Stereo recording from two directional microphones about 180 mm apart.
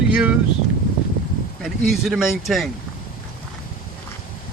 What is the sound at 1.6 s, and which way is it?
Speech, centre (ahead or behind).